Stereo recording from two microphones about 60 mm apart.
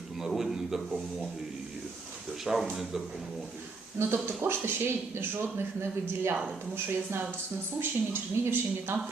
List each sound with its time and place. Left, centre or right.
0.2 s a sound: centre
2.4 s speech: centre
3.9 s speech: right
7.8 s a woman's voice: right